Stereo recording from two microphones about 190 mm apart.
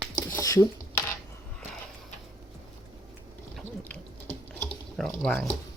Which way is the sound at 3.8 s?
10° left (ahead or behind).